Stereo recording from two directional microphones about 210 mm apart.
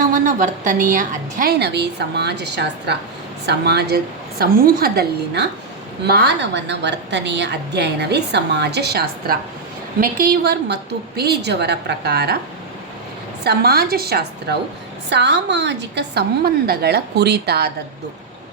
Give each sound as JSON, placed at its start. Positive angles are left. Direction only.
{"t": 0.1, "sound": "a woman's voice", "side_deg": -35}
{"t": 13.4, "sound": "a woman's voice", "side_deg": -50}